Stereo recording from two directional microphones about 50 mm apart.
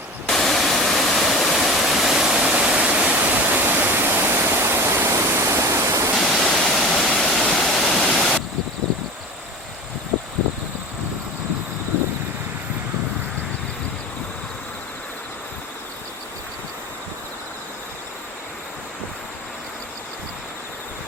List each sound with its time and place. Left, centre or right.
0.3 s waterfall: centre; by 3.2 s right
3.4 s waterfall: right
5.1 s waterfall: right
6.1 s waterfall: centre